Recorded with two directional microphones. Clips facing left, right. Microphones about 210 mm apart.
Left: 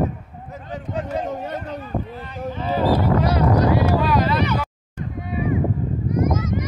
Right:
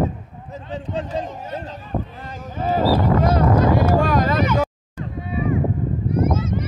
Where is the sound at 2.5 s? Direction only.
45° right (ahead or behind).